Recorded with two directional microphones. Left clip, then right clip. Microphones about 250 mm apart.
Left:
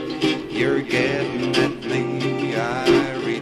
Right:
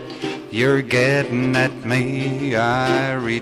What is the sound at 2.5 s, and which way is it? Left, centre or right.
Music, right.